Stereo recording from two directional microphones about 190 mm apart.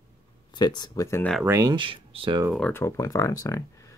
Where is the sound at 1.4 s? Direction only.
15° right (ahead or behind).